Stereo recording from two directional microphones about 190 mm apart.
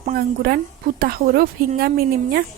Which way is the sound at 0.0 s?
50° right (ahead or behind).